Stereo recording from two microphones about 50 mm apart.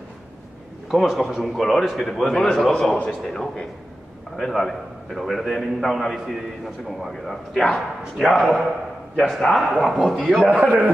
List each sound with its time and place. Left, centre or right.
1.0 s a man's voice: centre
1.4 s a man's voice: centre
10.6 s a man's voice: right